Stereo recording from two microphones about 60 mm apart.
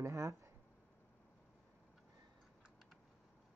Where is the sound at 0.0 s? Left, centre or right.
Right.